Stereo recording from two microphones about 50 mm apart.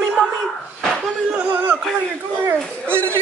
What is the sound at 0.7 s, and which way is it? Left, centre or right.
Speech, centre.